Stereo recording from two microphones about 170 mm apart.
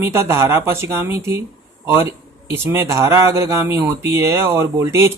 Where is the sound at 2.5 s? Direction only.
15° right (ahead or behind).